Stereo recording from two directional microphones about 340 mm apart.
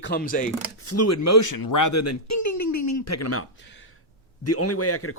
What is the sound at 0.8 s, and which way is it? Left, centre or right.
A man's voice, left.